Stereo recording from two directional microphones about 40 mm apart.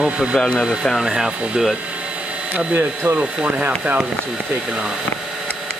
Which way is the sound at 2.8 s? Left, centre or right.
Right.